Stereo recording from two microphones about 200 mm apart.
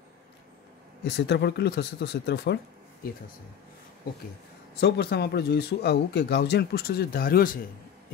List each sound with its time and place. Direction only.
1.0 s speech: 55° left (ahead or behind)
4.7 s speech: 55° left (ahead or behind)